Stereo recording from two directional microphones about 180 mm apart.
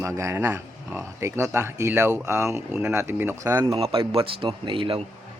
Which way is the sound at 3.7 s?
30° right (ahead or behind).